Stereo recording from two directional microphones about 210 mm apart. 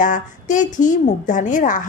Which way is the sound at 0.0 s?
40° left (ahead or behind).